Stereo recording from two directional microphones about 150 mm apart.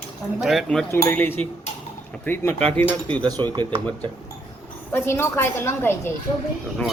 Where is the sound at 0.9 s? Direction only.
15° left (ahead or behind).